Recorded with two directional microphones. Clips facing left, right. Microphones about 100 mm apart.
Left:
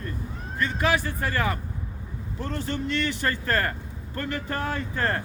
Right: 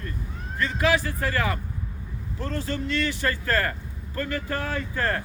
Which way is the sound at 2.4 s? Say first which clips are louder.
Even; 20° left (ahead or behind).